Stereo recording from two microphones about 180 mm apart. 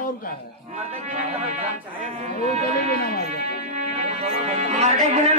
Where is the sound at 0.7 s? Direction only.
40° right (ahead or behind).